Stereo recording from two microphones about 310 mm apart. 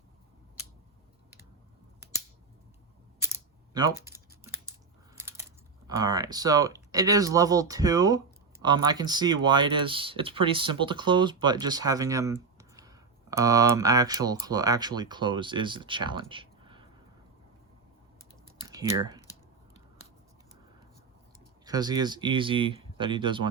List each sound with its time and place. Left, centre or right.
3.2 s camera: centre
4.0 s computer keyboard: centre
5.9 s speech: centre
18.6 s typing: centre
18.9 s speech: centre
21.6 s speech: centre